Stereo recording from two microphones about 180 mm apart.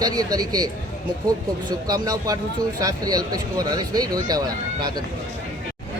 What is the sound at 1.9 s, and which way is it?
Speech, 20° right (ahead or behind).